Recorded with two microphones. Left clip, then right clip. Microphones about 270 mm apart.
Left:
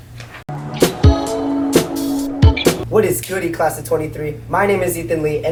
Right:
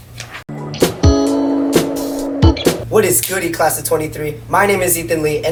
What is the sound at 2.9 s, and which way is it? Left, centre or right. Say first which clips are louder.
Speech: right 2 dB; centre.